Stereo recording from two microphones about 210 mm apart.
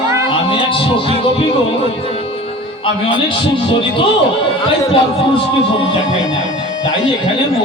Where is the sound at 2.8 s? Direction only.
25° left (ahead or behind).